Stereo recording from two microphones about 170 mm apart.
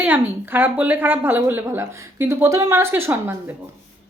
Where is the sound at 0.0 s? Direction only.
10° right (ahead or behind).